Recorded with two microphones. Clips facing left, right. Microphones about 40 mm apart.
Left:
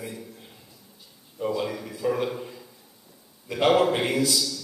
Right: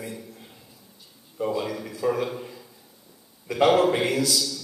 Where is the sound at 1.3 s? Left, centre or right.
Centre.